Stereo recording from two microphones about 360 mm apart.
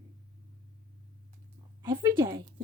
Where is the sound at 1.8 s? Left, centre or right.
Centre.